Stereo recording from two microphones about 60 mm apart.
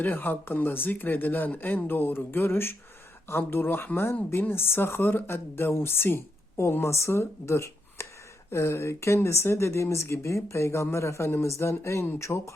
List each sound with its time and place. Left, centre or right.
0.0 s speech: left